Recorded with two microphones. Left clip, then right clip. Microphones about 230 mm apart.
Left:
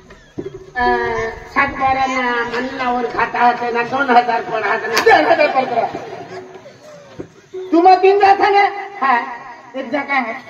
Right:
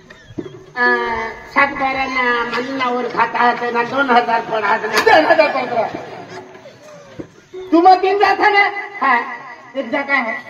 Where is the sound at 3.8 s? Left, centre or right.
Right.